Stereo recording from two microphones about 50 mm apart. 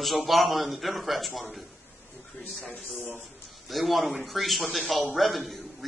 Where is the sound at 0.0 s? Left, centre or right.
Centre.